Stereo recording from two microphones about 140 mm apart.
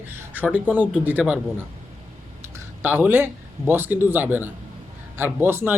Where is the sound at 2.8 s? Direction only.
15° right (ahead or behind).